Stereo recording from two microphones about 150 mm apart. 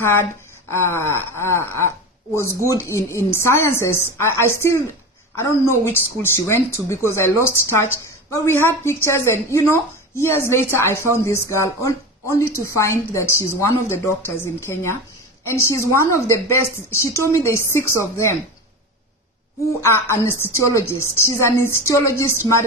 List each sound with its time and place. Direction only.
0.0 s a woman's voice: 15° left (ahead or behind)
19.8 s speech: 15° left (ahead or behind)